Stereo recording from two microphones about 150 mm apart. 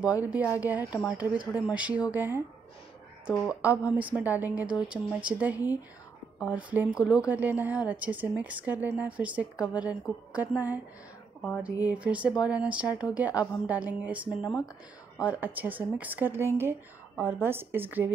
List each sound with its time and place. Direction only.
0.0 s a woman's voice: 10° right (ahead or behind)
11.8 s a woman's voice: 10° right (ahead or behind)